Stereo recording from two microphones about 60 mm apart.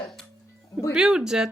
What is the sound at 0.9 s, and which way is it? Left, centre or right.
Speech, centre.